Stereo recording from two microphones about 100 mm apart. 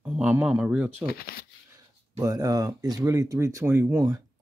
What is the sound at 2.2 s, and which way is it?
Speech, 40° right (ahead or behind).